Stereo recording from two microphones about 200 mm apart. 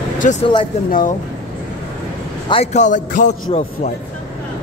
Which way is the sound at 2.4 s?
30° left (ahead or behind).